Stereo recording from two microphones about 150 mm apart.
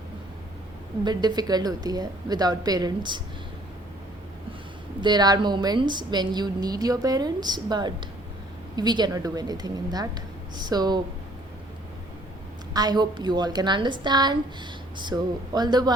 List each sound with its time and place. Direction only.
1.0 s a woman's voice: 25° right (ahead or behind)
4.9 s a woman's voice: 30° right (ahead or behind)
12.7 s a woman's voice: 25° right (ahead or behind)